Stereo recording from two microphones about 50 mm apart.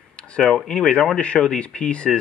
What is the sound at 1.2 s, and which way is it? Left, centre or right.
Speech, left.